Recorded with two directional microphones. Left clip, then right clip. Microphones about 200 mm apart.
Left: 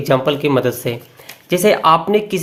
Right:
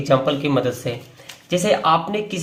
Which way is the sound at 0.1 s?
25° left (ahead or behind).